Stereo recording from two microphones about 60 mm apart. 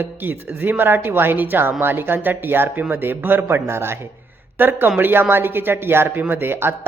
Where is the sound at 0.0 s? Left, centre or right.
Right.